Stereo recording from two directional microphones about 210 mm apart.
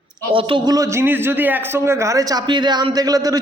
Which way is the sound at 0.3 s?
25° right (ahead or behind).